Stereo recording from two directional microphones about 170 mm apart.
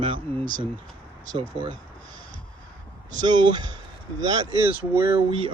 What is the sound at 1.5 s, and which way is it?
Speech, 35° right (ahead or behind).